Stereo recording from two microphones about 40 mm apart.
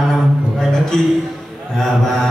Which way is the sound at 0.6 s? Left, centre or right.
Centre.